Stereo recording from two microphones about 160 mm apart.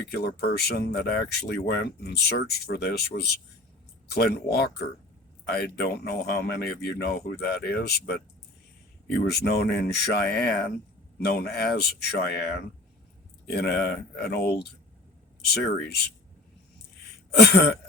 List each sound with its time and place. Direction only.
0.1 s speech: 85° left
9.0 s speech: 80° left
17.3 s speech: 90° left